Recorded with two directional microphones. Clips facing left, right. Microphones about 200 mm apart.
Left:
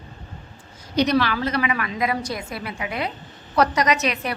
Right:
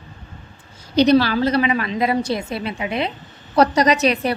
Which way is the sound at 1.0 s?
30° right (ahead or behind).